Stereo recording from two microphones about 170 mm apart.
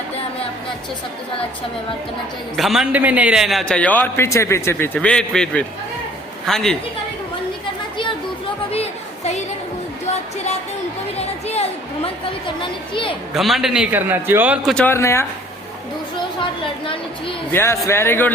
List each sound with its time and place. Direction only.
2.6 s a man's voice: centre (ahead or behind)
8.7 s chatter: 40° left (ahead or behind)
11.2 s a sound: 40° left (ahead or behind)
12.9 s a woman's voice: 30° left (ahead or behind)
13.3 s a man's voice: centre (ahead or behind)
14.8 s a man's voice: 15° left (ahead or behind)
16.8 s a sound: 30° left (ahead or behind)
17.5 s a man's voice: 15° left (ahead or behind)